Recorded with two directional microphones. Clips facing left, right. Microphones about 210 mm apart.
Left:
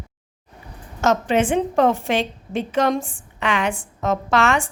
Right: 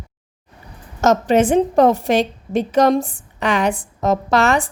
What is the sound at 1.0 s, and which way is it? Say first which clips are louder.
A woman's voice: right 4 dB; 40° right (ahead or behind).